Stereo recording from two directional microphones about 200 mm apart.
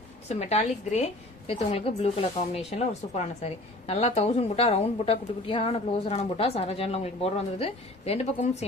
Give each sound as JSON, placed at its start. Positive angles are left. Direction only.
{"t": 0.3, "sound": "a woman's voice", "side_deg": 35}